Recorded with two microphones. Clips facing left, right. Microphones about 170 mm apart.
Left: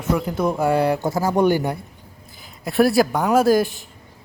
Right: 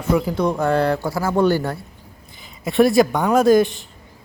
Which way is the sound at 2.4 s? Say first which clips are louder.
Right 2 dB; centre (ahead or behind).